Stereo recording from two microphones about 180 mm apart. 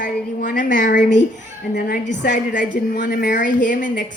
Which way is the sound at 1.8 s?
65° left (ahead or behind).